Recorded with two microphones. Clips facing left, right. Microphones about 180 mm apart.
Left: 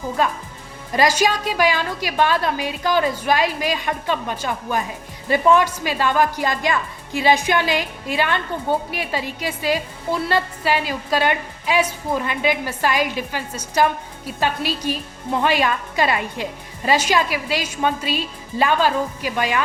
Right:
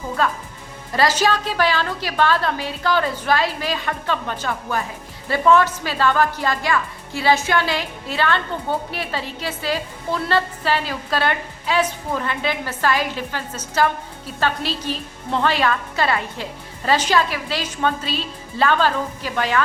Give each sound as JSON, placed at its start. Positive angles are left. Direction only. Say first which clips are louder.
{"t": 0.2, "sound": "a woman's voice", "louder": "even", "side_deg": 15}